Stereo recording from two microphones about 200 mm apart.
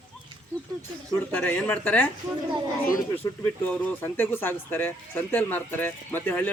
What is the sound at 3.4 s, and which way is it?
Speech, 10° left (ahead or behind).